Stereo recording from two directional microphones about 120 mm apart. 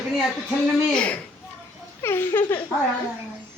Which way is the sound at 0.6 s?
5° left (ahead or behind).